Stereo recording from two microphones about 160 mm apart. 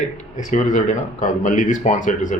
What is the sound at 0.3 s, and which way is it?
Speech, 50° left (ahead or behind).